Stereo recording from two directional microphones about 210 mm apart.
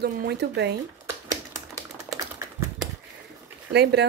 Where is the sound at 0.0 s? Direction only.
50° right (ahead or behind).